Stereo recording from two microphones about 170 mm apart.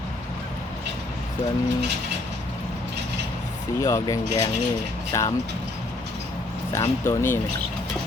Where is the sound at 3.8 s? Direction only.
15° left (ahead or behind).